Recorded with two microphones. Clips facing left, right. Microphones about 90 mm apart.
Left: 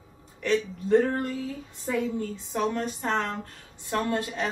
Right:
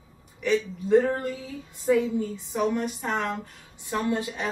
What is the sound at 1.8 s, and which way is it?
A woman's voice, 10° right (ahead or behind).